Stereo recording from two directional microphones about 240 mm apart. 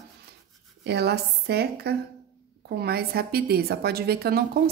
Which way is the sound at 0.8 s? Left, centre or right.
Right.